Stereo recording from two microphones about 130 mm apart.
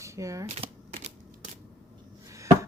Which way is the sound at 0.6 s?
45° right (ahead or behind).